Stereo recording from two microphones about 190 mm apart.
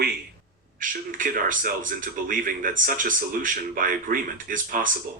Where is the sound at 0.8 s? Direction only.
45° right (ahead or behind).